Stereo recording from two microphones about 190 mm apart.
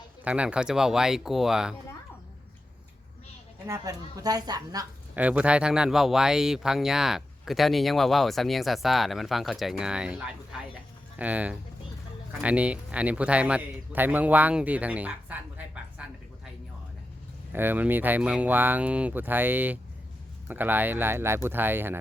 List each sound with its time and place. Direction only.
0.3 s speech: 5° right (ahead or behind)
3.7 s speech: 20° right (ahead or behind)
5.1 s speech: 10° right (ahead or behind)
17.5 s speech: 10° right (ahead or behind)